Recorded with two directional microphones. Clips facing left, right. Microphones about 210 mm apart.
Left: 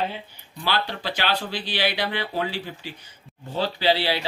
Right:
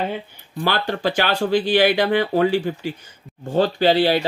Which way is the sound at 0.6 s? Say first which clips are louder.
Right 5 dB; 50° right (ahead or behind).